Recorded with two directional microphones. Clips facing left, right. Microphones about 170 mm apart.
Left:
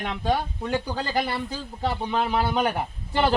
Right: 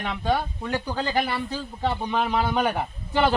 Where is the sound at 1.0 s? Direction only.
10° right (ahead or behind).